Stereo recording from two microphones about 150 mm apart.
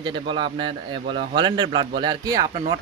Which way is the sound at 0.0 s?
35° right (ahead or behind).